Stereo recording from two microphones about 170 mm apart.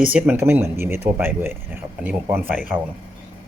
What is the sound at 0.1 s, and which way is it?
Speech, 10° right (ahead or behind).